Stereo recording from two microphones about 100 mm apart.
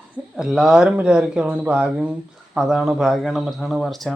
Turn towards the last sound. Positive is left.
turn(degrees=0)  # may be behind; listen again after turning